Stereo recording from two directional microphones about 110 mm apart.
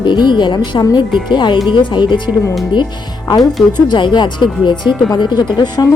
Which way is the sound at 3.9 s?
45° left (ahead or behind).